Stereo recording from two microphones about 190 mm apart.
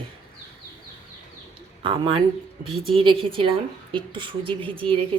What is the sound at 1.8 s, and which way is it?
Speech, 25° right (ahead or behind).